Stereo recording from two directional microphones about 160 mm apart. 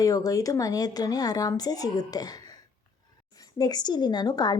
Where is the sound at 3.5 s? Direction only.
25° left (ahead or behind).